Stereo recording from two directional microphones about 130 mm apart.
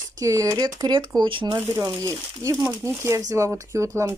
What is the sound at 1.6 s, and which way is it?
Speech, 25° right (ahead or behind).